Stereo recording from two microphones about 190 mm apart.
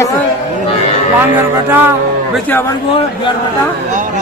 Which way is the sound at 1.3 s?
10° right (ahead or behind).